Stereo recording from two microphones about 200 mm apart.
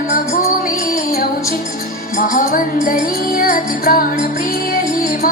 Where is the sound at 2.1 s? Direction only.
45° left (ahead or behind).